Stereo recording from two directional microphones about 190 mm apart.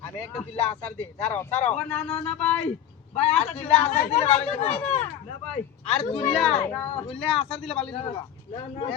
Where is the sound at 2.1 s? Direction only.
35° left (ahead or behind).